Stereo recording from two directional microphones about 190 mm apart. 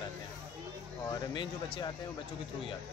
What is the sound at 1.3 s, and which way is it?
Speech, 25° left (ahead or behind).